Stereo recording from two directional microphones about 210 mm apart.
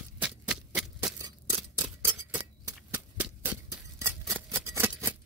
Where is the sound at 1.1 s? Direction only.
15° right (ahead or behind).